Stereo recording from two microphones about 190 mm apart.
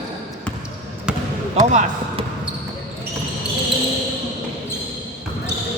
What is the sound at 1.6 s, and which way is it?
Speech, 30° right (ahead or behind).